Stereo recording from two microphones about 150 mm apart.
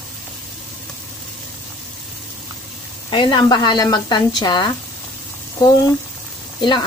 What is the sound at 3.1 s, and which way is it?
A woman's voice, 35° left (ahead or behind).